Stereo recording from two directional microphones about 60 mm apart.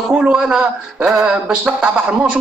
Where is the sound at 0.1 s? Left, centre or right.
Centre.